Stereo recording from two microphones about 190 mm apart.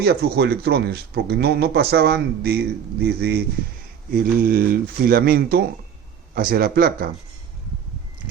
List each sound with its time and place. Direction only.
0.0 s speech: 55° right (ahead or behind)